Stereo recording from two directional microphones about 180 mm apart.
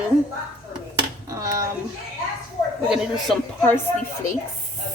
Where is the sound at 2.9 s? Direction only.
5° right (ahead or behind).